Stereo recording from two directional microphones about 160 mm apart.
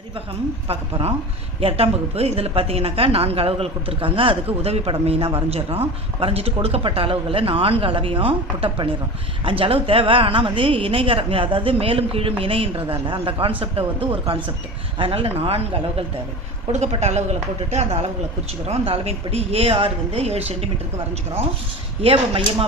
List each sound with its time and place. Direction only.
0.7 s a woman's voice: 40° right (ahead or behind)
22.0 s a woman's voice: 35° right (ahead or behind)